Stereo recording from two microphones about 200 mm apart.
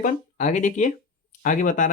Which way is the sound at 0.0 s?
40° left (ahead or behind).